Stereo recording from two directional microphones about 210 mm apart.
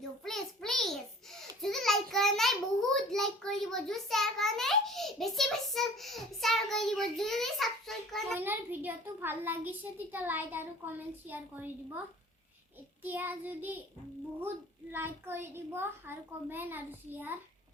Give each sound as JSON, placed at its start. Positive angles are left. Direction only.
{"t": 0.3, "sound": "a sound", "side_deg": 0}
{"t": 1.4, "sound": "child singing", "side_deg": 0}
{"t": 8.4, "sound": "a child's voice", "side_deg": -10}
{"t": 13.0, "sound": "a child's voice", "side_deg": -10}
{"t": 14.9, "sound": "a child's voice", "side_deg": -10}